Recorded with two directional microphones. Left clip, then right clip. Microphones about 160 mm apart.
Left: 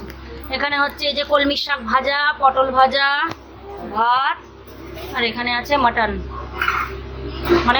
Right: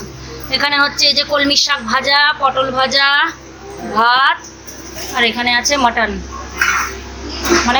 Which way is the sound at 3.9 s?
30° right (ahead or behind).